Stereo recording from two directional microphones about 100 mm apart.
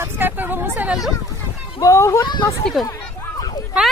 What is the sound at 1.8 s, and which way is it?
Speech, 30° left (ahead or behind).